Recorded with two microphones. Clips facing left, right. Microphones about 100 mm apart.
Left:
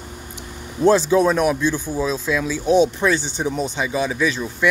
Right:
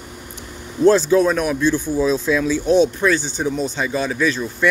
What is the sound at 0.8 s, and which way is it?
Speech, 20° left (ahead or behind).